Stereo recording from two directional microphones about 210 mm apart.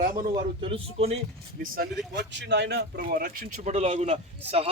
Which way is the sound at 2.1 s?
55° right (ahead or behind).